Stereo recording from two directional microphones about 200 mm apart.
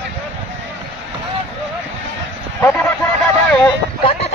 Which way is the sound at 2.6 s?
10° left (ahead or behind).